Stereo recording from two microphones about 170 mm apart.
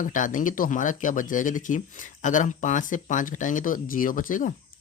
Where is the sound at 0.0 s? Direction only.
50° left (ahead or behind).